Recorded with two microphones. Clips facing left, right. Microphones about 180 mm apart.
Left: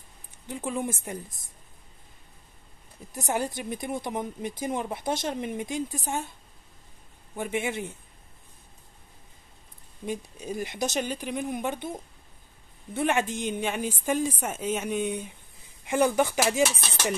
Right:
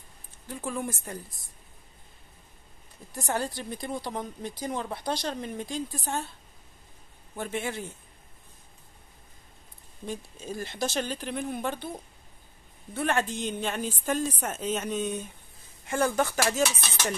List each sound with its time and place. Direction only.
0.5 s a woman's voice: 20° left (ahead or behind)
3.1 s a woman's voice: 20° left (ahead or behind)
7.3 s a woman's voice: 15° left (ahead or behind)
10.0 s a woman's voice: 15° left (ahead or behind)
13.0 s a woman's voice: 15° left (ahead or behind)